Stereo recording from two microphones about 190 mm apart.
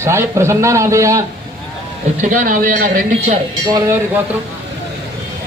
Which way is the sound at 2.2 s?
45° right (ahead or behind).